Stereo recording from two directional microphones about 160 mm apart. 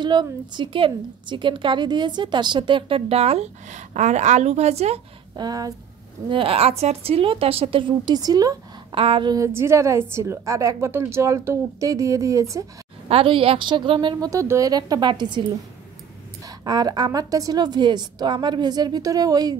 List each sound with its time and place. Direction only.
0.0 s a woman's voice: 30° right (ahead or behind)
5.3 s a woman's voice: 25° right (ahead or behind)
6.3 s a woman's voice: 35° right (ahead or behind)
8.9 s a woman's voice: 35° right (ahead or behind)
9.3 s a woman's voice: 15° right (ahead or behind)
13.1 s a woman's voice: 35° right (ahead or behind)
16.4 s a woman's voice: 25° right (ahead or behind)